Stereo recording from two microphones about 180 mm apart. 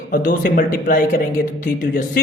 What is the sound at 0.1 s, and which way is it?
Speech, 50° left (ahead or behind).